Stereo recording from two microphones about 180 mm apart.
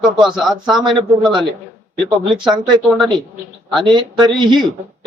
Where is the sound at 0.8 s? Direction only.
25° right (ahead or behind).